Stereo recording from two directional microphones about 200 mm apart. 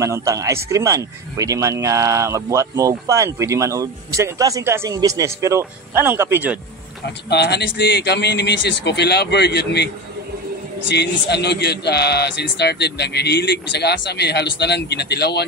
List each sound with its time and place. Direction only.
0.0 s speech: 15° right (ahead or behind)
7.2 s speech: 55° left (ahead or behind)
10.9 s speech: 55° left (ahead or behind)